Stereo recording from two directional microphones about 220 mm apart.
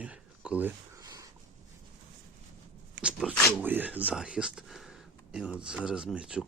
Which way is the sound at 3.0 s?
5° right (ahead or behind).